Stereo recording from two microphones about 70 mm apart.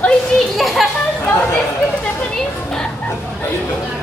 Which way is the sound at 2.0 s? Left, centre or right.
Centre.